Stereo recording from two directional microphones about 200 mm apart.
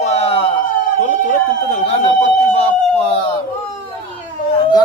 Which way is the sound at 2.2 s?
35° left (ahead or behind).